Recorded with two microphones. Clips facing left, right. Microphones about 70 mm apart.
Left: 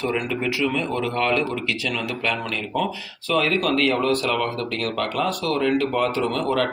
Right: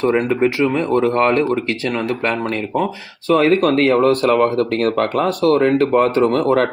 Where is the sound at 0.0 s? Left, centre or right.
Right.